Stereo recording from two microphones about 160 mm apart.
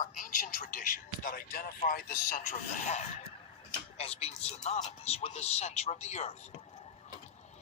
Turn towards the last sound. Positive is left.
turn(degrees=45)  # may be behind; listen again after turning